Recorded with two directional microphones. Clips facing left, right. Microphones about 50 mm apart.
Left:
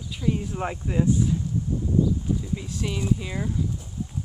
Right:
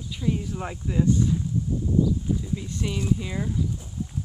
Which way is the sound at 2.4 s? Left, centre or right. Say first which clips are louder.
Even; centre.